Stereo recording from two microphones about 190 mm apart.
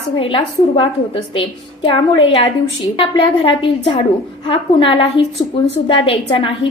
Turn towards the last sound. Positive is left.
turn(degrees=30)  # may be behind; listen again after turning